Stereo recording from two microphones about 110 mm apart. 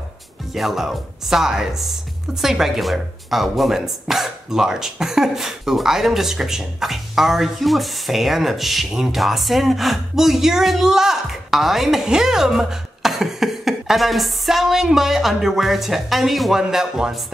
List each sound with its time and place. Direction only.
0.6 s speech: centre (ahead or behind)